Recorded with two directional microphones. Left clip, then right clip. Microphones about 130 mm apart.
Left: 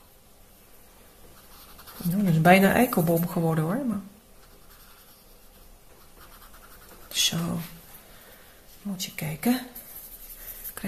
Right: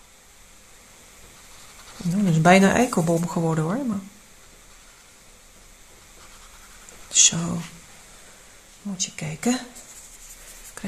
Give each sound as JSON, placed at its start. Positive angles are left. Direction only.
{"t": 2.2, "sound": "speech", "side_deg": -30}
{"t": 7.1, "sound": "a sound", "side_deg": -30}
{"t": 8.8, "sound": "speech", "side_deg": -15}